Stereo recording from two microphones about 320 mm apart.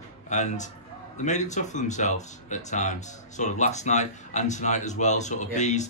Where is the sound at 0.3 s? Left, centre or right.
Left.